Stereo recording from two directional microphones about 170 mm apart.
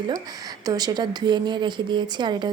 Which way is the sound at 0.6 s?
20° right (ahead or behind).